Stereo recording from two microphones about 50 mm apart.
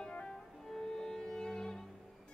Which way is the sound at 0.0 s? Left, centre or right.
Left.